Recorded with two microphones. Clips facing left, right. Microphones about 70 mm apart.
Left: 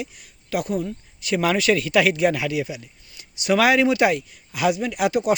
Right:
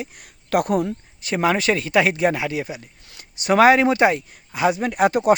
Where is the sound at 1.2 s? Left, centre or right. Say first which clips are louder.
Right 1 dB; right.